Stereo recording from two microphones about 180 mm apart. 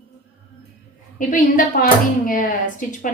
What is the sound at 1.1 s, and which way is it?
Speech, 45° left (ahead or behind).